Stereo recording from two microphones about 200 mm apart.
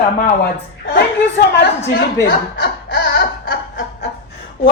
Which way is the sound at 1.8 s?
55° left (ahead or behind).